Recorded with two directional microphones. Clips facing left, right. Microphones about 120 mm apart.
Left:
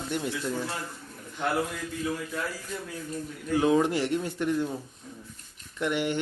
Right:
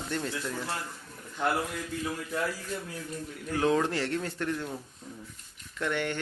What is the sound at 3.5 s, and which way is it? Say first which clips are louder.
Speech: left 3 dB; 15° left (ahead or behind).